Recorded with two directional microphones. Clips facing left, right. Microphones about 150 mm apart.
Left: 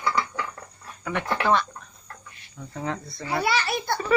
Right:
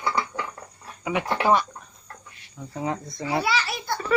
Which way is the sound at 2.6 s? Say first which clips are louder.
Right 2 dB; 15° right (ahead or behind).